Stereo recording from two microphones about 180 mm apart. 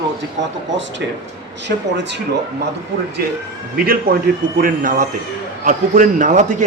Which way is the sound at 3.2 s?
60° right (ahead or behind).